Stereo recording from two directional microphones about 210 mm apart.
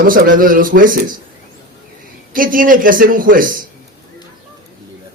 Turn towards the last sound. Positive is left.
turn(degrees=-40)  # may be behind; listen again after turning